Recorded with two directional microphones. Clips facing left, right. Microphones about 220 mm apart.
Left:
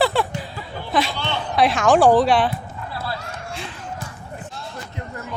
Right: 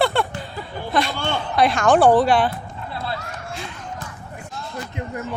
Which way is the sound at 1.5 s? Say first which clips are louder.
Even; centre (ahead or behind).